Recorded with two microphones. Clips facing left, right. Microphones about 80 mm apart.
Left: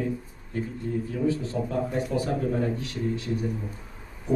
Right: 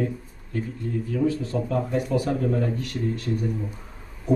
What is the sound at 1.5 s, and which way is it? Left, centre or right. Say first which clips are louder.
A man's voice: right 3 dB; right.